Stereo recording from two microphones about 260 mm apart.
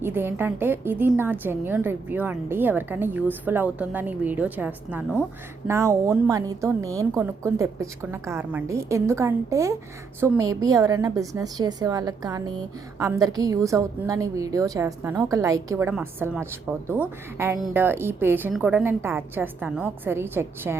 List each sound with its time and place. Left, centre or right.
0.0 s a woman's voice: centre